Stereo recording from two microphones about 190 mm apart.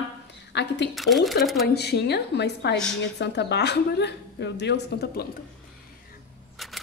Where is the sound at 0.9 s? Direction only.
Centre (ahead or behind).